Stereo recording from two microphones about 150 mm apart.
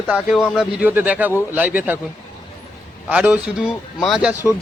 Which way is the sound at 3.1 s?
5° right (ahead or behind).